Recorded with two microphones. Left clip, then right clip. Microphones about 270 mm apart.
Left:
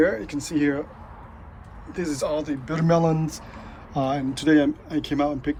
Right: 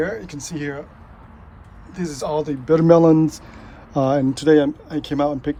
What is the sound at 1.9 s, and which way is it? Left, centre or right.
A man's voice, centre.